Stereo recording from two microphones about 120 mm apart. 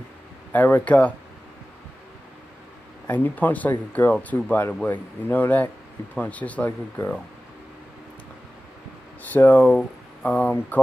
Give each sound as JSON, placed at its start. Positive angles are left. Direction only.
{"t": 0.5, "sound": "speech", "side_deg": 15}
{"t": 3.1, "sound": "speech", "side_deg": 15}
{"t": 9.2, "sound": "speech", "side_deg": 15}